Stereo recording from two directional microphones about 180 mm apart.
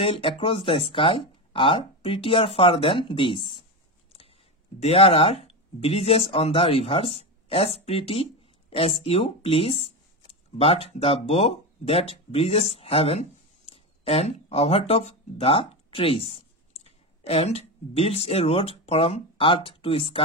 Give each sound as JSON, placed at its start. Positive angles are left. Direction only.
{"t": 0.0, "sound": "speech", "side_deg": 30}
{"t": 4.8, "sound": "speech", "side_deg": 35}